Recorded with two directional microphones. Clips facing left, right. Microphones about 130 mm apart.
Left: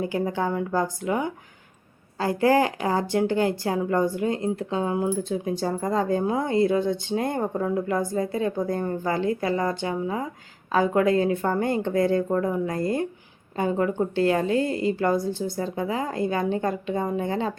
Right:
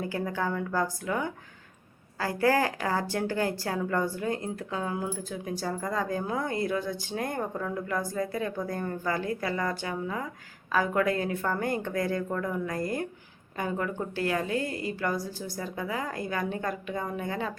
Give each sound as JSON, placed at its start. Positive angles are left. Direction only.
{"t": 0.0, "sound": "speech", "side_deg": 20}